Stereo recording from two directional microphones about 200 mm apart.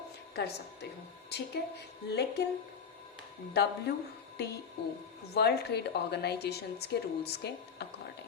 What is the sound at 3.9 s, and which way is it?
Speech, 50° left (ahead or behind).